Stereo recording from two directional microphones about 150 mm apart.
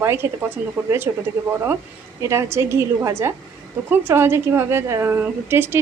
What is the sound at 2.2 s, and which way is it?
A woman's voice, 20° right (ahead or behind).